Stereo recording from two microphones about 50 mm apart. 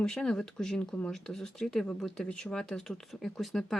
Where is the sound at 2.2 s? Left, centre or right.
Centre.